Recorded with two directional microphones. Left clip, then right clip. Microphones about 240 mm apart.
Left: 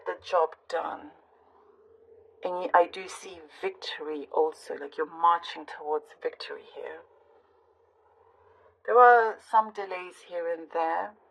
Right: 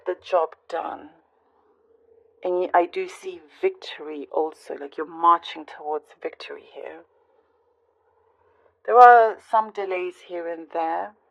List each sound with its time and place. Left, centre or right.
0.0 s speech: right
2.4 s a woman's voice: right
8.8 s a woman's voice: right